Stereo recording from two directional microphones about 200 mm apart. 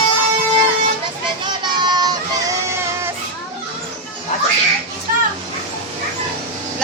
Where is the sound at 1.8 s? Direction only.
20° right (ahead or behind).